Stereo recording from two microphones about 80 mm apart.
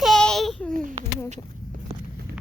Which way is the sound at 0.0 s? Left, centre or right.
Centre.